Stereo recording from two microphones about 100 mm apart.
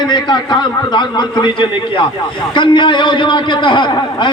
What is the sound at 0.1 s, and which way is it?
A man's voice, 50° left (ahead or behind).